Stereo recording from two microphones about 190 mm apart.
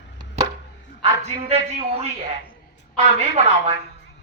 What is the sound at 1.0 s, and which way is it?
A man's voice, 35° right (ahead or behind).